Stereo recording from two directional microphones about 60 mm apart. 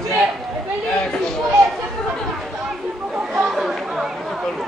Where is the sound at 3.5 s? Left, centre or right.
Centre.